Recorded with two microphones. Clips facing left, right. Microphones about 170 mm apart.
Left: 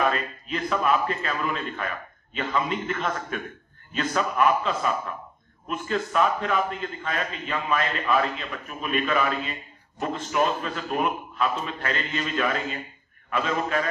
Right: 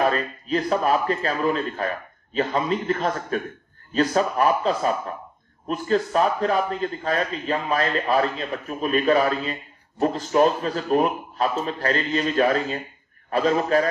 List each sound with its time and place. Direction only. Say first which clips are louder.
0.0 s a man's voice: right 3 dB; 35° right (ahead or behind)